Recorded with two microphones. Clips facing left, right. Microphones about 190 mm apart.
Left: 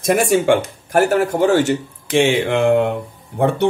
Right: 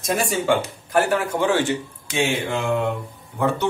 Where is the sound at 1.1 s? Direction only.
40° left (ahead or behind).